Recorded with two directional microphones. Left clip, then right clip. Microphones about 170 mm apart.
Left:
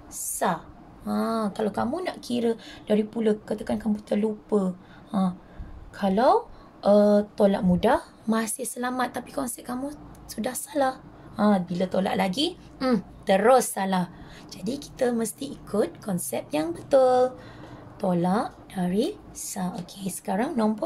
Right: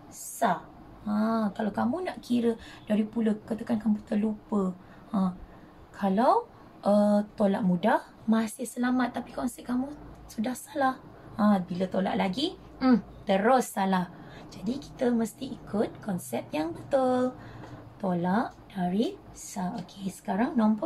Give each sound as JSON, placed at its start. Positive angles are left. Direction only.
{"t": 1.0, "sound": "a woman's voice", "side_deg": 80}
{"t": 5.9, "sound": "a woman's voice", "side_deg": 70}
{"t": 14.5, "sound": "a woman's voice", "side_deg": 85}
{"t": 18.0, "sound": "a woman's voice", "side_deg": 80}